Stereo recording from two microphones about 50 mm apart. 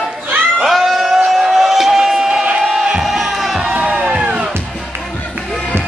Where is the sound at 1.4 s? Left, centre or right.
Centre.